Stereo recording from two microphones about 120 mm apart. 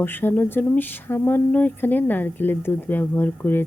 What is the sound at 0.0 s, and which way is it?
A woman's voice, 15° left (ahead or behind).